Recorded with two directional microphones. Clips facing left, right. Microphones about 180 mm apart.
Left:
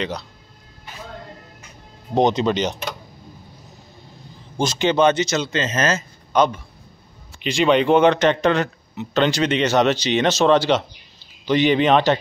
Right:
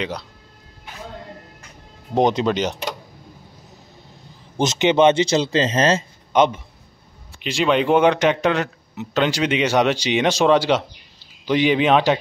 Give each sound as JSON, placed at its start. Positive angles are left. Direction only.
{"t": 2.1, "sound": "speech", "side_deg": -5}
{"t": 4.6, "sound": "speech", "side_deg": -20}
{"t": 7.3, "sound": "speech", "side_deg": 0}